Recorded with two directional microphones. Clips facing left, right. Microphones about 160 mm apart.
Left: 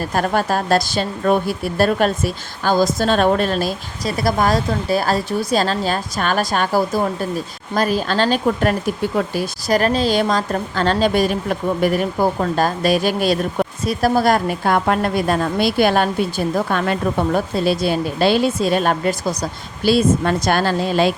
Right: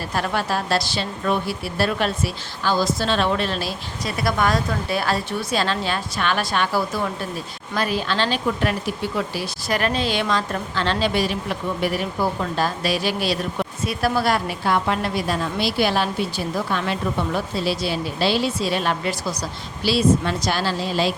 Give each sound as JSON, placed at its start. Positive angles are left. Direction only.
{"t": 0.0, "sound": "speech", "side_deg": 45}